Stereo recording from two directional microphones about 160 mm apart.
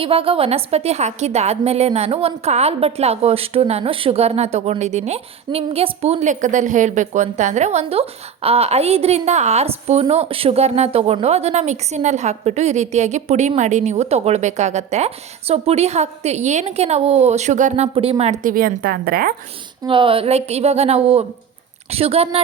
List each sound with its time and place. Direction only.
0.0 s a woman's voice: 35° right (ahead or behind)
17.9 s a woman's voice: 35° right (ahead or behind)
18.4 s a woman's voice: 60° right (ahead or behind)
19.8 s a woman's voice: 30° right (ahead or behind)